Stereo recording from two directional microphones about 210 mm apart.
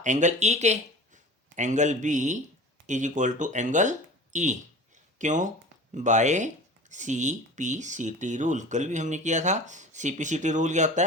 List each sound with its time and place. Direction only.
0.0 s speech: 35° right (ahead or behind)